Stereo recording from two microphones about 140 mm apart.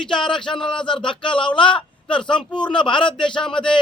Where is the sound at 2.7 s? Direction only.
35° left (ahead or behind).